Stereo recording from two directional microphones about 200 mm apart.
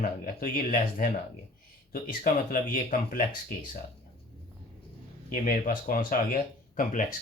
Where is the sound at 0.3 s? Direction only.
45° left (ahead or behind).